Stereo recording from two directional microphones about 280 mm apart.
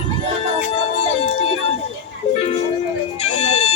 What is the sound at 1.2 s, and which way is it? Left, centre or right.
Music, left.